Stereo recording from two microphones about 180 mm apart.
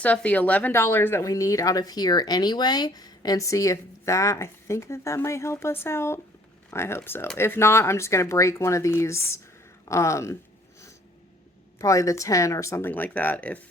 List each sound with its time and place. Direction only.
0.0 s speech: 10° left (ahead or behind)
11.8 s speech: 15° left (ahead or behind)